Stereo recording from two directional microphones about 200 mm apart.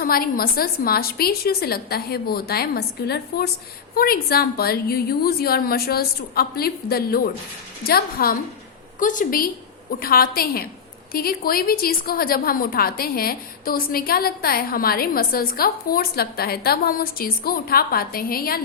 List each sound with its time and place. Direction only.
0.0 s a woman's voice: 45° left (ahead or behind)